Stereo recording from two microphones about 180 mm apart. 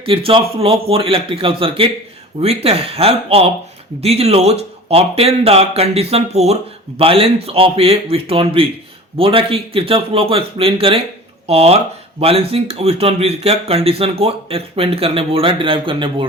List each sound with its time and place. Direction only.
0.0 s speech: 30° right (ahead or behind)